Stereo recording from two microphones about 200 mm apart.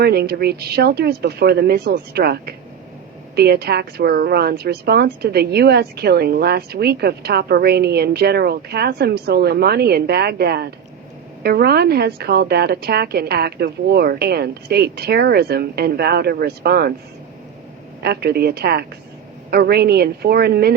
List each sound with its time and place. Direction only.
0.0 s a woman's voice: 50° right (ahead or behind)
18.0 s a woman's voice: 55° right (ahead or behind)